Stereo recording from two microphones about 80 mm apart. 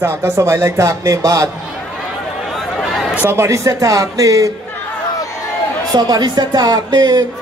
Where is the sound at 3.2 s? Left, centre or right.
Right.